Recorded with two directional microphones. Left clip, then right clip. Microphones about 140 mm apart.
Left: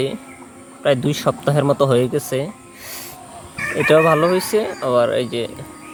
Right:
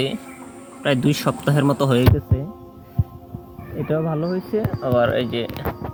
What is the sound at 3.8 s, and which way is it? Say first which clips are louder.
Speech: left 11 dB; 20° left (ahead or behind).